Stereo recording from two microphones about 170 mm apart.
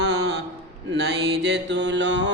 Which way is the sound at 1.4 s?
90° right.